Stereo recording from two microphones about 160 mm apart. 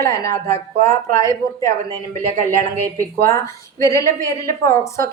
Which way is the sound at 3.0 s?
20° left (ahead or behind).